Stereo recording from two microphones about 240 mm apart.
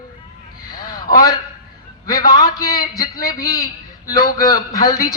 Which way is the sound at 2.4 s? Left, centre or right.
Centre.